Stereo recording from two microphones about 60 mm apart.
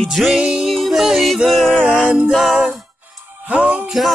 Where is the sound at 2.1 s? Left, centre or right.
Centre.